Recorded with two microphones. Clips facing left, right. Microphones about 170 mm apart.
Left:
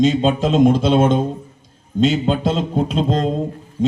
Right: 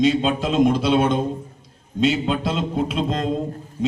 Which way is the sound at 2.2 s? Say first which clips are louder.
Left 4 dB; 35° left (ahead or behind).